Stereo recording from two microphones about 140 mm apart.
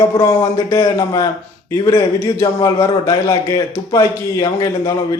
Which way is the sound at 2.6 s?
25° left (ahead or behind).